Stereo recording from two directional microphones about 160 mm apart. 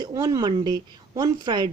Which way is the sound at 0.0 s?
25° right (ahead or behind).